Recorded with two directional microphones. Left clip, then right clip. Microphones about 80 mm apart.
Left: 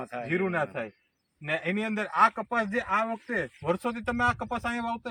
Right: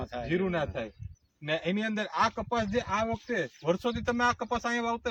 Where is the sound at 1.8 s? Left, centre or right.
Right.